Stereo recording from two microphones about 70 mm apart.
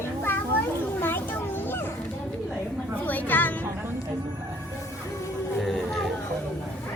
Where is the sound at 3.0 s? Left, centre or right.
Left.